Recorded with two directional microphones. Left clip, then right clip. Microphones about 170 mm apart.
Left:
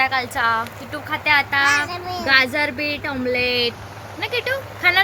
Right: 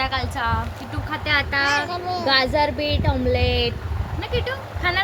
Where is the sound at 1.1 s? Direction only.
45° left (ahead or behind).